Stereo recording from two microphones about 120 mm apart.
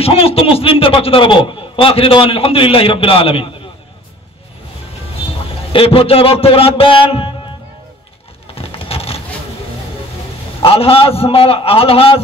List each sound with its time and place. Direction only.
0.0 s a man's voice: 55° left (ahead or behind)
5.7 s a man's voice: 50° left (ahead or behind)
8.5 s vehicle: 55° left (ahead or behind)
10.6 s a man's voice: 50° left (ahead or behind)